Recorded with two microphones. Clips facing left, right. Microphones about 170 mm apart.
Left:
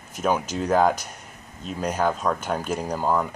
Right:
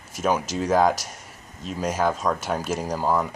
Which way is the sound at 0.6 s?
Centre (ahead or behind).